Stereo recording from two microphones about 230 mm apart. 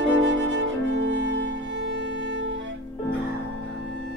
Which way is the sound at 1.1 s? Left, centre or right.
Right.